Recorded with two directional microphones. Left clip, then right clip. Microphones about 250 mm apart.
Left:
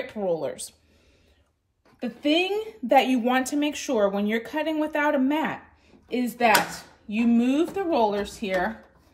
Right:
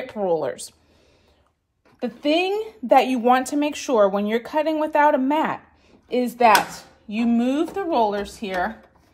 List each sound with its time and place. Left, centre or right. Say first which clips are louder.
0.0 s speech: right 4 dB; right
2.0 s a woman's voice: right 3 dB; centre